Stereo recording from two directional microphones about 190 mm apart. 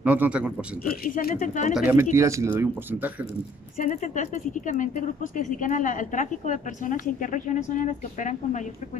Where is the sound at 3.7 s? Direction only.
45° left (ahead or behind).